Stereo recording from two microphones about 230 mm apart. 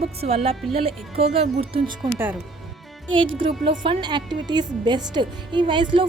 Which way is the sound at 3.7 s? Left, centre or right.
Right.